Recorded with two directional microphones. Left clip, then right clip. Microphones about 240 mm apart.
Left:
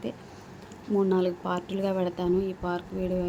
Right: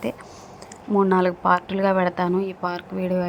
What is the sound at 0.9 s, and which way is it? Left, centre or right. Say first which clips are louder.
A woman's voice: right 6 dB; centre.